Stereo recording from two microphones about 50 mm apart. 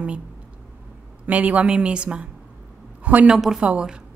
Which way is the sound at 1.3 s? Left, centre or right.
Right.